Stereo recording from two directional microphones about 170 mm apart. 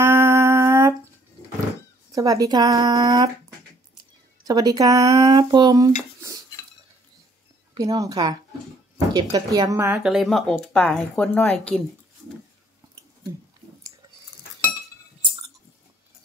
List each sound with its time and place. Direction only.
0.0 s a sound: 15° right (ahead or behind)
2.1 s speech: 20° right (ahead or behind)
4.5 s speech: 20° right (ahead or behind)
7.7 s speech: 20° right (ahead or behind)
10.0 s speech: centre (ahead or behind)